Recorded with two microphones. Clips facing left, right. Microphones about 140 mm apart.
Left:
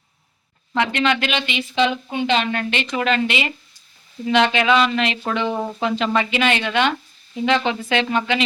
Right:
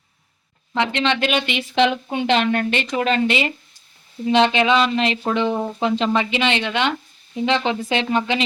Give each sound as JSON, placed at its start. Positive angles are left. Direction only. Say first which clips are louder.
{"t": 0.8, "sound": "speech", "louder": "even", "side_deg": -25}
{"t": 1.3, "sound": "a woman's voice", "louder": "right 2 dB", "side_deg": -50}